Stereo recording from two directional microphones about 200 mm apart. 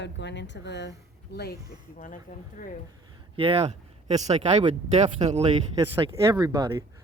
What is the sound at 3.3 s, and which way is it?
Speech, 30° right (ahead or behind).